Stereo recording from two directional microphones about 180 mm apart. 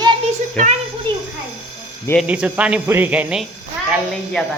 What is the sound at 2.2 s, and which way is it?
Speech, 5° right (ahead or behind).